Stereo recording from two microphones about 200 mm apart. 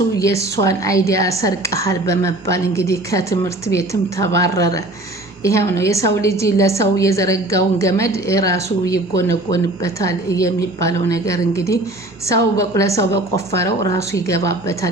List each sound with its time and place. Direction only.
0.2 s a woman's voice: 15° left (ahead or behind)